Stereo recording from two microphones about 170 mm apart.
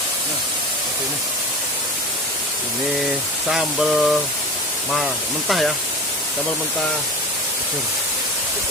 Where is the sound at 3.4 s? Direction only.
5° right (ahead or behind).